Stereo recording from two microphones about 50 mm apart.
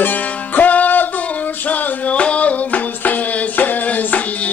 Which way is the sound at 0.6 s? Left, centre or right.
Left.